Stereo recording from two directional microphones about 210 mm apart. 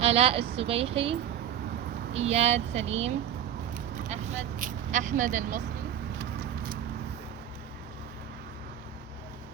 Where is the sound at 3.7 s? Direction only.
40° right (ahead or behind).